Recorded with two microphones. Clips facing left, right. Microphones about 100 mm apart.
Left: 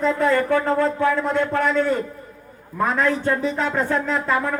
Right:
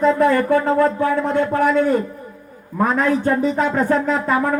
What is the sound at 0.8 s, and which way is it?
Speech, 45° right (ahead or behind).